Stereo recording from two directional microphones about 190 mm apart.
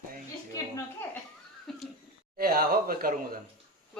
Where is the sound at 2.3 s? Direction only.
50° right (ahead or behind).